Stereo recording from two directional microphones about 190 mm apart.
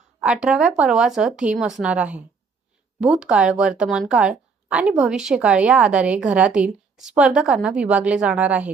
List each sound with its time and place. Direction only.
0.2 s a woman's voice: 5° right (ahead or behind)